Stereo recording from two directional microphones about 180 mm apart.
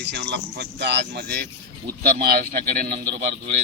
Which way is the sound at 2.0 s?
55° right (ahead or behind).